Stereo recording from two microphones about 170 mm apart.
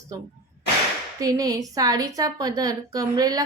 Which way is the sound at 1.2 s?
20° right (ahead or behind).